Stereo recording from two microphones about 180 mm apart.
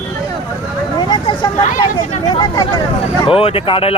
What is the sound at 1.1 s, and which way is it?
Vehicle, 25° left (ahead or behind).